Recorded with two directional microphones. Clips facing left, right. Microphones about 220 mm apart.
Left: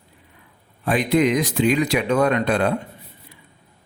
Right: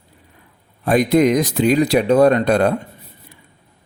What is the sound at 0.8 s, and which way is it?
Speech, 45° right (ahead or behind).